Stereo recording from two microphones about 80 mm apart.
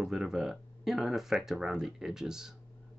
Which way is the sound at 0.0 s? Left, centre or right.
Centre.